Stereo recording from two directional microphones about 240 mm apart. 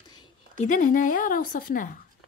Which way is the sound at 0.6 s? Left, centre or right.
Left.